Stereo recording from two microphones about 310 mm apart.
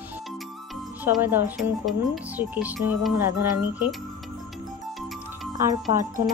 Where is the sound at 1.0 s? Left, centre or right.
Centre.